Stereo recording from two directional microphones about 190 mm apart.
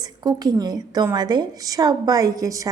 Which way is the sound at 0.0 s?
20° right (ahead or behind).